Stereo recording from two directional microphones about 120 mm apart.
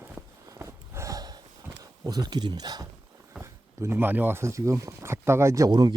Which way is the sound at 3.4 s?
20° right (ahead or behind).